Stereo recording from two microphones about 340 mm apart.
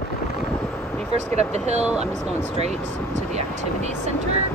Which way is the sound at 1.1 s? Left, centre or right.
Centre.